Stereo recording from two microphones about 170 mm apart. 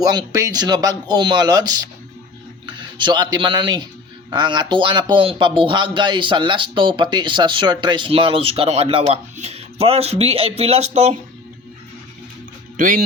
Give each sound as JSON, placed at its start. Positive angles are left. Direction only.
{"t": 0.0, "sound": "speech", "side_deg": -20}
{"t": 12.7, "sound": "speech", "side_deg": -55}